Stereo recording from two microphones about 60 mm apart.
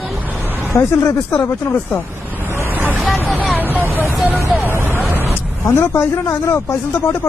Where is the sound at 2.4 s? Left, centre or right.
Right.